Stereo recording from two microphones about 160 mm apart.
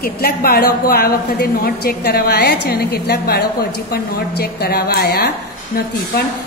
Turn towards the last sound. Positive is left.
turn(degrees=80)